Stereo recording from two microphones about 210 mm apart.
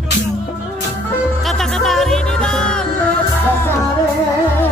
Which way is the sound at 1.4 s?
Centre (ahead or behind).